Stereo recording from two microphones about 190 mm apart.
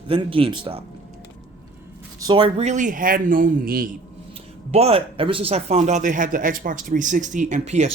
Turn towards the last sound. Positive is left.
turn(degrees=-35)  # may be behind; listen again after turning